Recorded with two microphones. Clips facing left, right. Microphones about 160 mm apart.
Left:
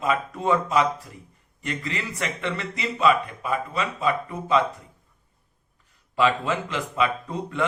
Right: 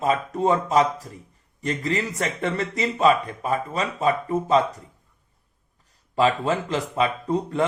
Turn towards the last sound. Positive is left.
turn(degrees=-35)  # may be behind; listen again after turning